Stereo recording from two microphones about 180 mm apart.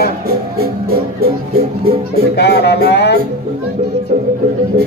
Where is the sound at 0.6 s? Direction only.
60° right (ahead or behind).